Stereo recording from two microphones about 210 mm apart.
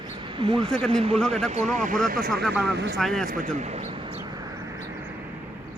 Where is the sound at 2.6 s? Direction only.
55° right (ahead or behind).